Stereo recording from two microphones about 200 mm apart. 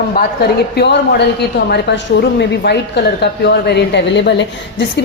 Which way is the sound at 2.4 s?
55° left (ahead or behind).